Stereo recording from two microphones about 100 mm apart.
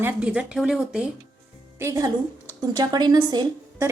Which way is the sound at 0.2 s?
15° right (ahead or behind).